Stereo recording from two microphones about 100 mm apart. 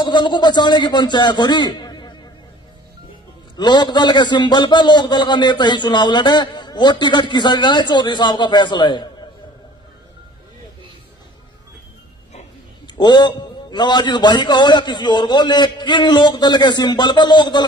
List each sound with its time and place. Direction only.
0.0 s a man's voice: 50° left (ahead or behind)
3.5 s a man's voice: 50° left (ahead or behind)
12.8 s a man's voice: 50° left (ahead or behind)